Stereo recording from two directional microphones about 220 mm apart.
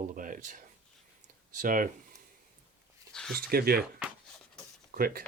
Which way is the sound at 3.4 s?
45° right (ahead or behind).